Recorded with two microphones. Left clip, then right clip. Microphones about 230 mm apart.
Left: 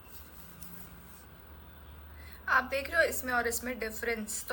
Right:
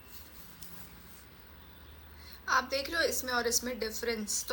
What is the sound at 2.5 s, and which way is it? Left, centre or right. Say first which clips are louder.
A woman's voice: left 1 dB; right.